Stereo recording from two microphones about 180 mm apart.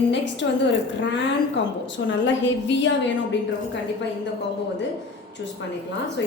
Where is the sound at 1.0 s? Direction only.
80° left.